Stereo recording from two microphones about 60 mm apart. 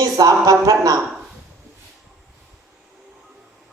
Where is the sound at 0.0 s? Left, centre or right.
Right.